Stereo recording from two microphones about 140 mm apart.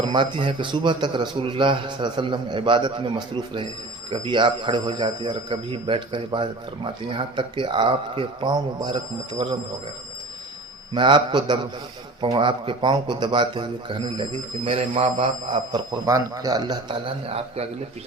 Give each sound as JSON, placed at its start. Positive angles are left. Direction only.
{"t": 0.0, "sound": "speech", "side_deg": -35}
{"t": 10.9, "sound": "speech", "side_deg": -35}
{"t": 17.2, "sound": "a man's voice", "side_deg": -45}